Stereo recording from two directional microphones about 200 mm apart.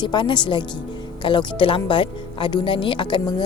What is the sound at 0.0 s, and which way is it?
Speech, 25° left (ahead or behind).